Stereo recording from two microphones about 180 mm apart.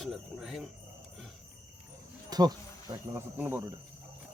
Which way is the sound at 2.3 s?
20° right (ahead or behind).